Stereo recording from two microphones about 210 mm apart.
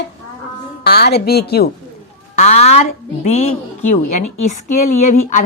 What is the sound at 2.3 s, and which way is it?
A woman's voice, 30° left (ahead or behind).